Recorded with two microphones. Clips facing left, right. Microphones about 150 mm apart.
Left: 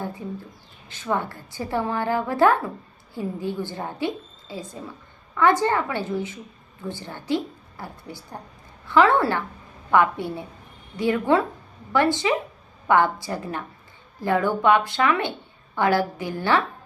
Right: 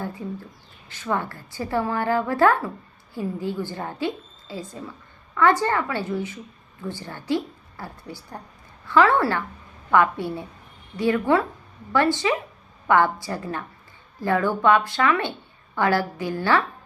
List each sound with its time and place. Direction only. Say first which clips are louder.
0.9 s a woman's voice: left 1 dB; 15° left (ahead or behind)